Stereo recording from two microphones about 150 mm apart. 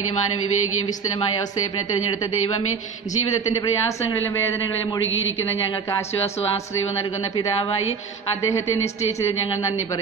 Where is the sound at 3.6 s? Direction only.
25° left (ahead or behind).